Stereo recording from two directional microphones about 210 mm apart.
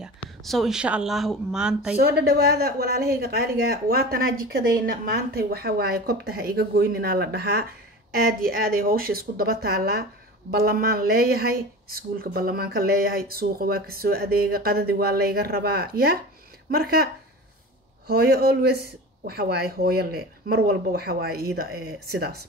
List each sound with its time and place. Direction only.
0.0 s speech: centre (ahead or behind)
2.0 s speech: 50° right (ahead or behind)